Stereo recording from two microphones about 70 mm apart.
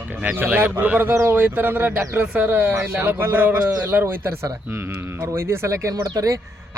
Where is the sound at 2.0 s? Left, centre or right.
Centre; by 6.3 s right.